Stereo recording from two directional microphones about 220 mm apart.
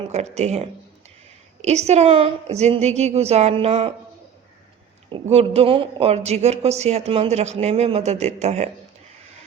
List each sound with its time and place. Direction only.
0.0 s speech: 30° right (ahead or behind)
5.3 s speech: 25° right (ahead or behind)